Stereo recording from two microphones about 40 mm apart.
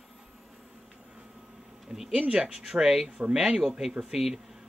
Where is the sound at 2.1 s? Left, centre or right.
Right.